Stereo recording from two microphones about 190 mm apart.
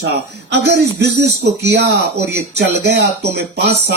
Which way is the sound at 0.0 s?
60° right (ahead or behind).